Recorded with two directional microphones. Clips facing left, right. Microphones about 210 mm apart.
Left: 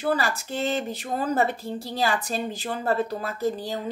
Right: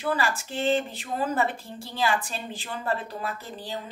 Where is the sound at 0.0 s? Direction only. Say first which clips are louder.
Left 2 dB; 40° left (ahead or behind).